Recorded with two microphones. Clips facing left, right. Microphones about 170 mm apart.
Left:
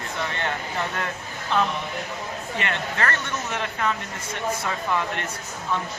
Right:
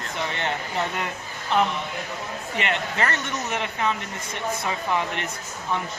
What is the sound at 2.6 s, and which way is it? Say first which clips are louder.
Speech: right 2 dB; 20° right (ahead or behind).